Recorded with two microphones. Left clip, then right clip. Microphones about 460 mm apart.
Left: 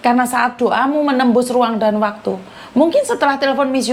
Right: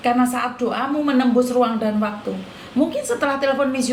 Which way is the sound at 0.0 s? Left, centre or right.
Left.